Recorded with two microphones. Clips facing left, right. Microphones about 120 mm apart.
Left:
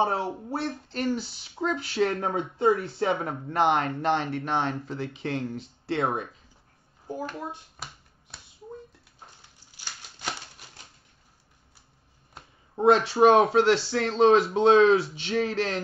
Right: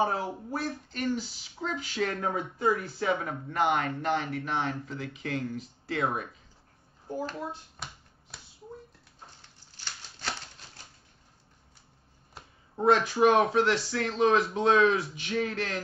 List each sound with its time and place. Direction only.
0.0 s speech: 25° left (ahead or behind)
9.7 s a sound: 10° left (ahead or behind)
12.8 s speech: 30° left (ahead or behind)